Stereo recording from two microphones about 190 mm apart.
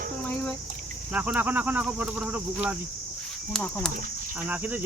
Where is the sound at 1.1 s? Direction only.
5° right (ahead or behind).